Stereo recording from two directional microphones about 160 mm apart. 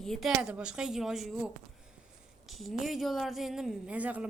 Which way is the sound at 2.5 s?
Centre (ahead or behind).